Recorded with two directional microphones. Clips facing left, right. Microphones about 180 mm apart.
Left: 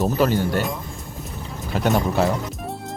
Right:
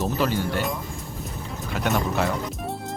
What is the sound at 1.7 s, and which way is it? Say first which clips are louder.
Speech: left 4 dB; 35° left (ahead or behind).